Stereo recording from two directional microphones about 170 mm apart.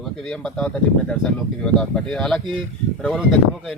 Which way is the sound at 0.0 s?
5° left (ahead or behind).